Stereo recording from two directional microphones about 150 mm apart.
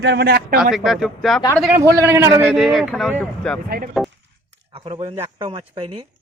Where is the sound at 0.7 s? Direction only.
Centre (ahead or behind).